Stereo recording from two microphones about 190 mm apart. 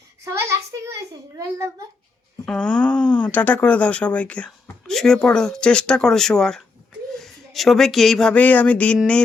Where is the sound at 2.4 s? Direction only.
5° left (ahead or behind).